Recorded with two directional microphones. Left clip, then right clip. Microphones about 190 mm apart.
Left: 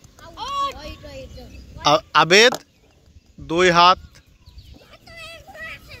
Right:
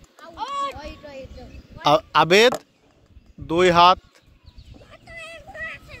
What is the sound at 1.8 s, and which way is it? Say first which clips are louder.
A man's voice: left 1 dB; 5° right (ahead or behind).